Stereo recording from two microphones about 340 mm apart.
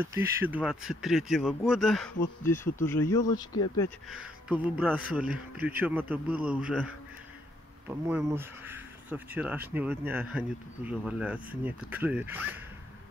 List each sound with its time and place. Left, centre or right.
0.1 s speech: centre
4.1 s speech: centre
8.1 s speech: centre